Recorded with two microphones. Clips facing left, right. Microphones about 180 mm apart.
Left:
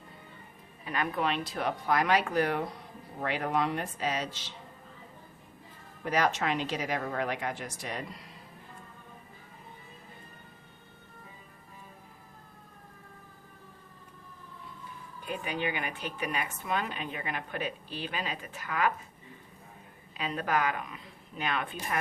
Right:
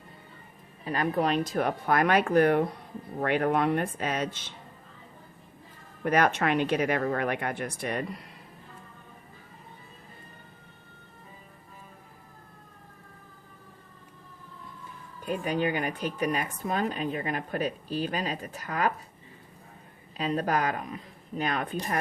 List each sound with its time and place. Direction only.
0.9 s speech: 35° right (ahead or behind); by 4.5 s 55° right (ahead or behind)
6.0 s speech: 55° right (ahead or behind)
15.2 s speech: 40° right (ahead or behind)
20.1 s speech: 40° right (ahead or behind)